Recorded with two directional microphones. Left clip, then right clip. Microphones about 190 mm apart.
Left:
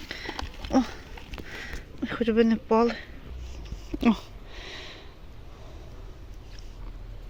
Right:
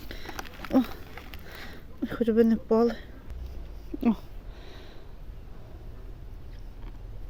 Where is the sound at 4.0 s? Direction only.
5° right (ahead or behind).